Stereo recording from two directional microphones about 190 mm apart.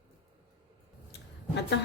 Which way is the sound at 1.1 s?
65° left (ahead or behind).